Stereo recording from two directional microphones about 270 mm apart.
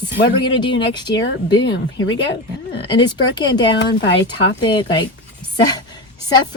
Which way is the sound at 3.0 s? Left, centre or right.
Centre.